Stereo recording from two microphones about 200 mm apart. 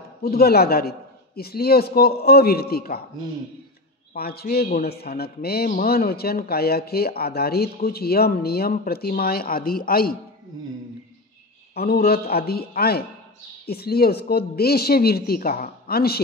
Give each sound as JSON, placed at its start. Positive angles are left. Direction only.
{"t": 0.2, "sound": "a man's voice", "side_deg": 50}
{"t": 4.1, "sound": "a man's voice", "side_deg": 50}
{"t": 11.7, "sound": "a man's voice", "side_deg": 50}